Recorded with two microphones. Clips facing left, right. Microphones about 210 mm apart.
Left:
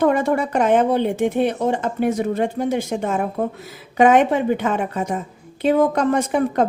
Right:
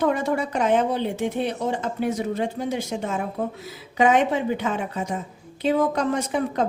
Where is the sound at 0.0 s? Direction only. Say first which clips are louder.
Left 5 dB; 55° left (ahead or behind).